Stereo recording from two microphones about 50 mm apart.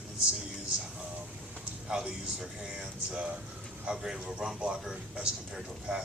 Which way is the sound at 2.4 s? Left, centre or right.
Centre.